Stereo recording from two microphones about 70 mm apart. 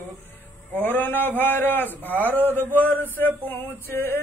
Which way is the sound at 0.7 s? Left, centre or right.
Left.